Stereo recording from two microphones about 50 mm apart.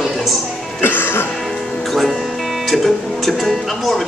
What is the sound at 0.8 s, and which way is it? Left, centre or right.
Music, left.